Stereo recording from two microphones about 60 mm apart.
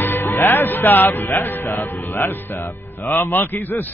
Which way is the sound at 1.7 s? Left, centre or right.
Left.